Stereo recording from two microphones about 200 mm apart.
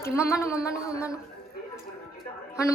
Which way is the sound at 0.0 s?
15° left (ahead or behind).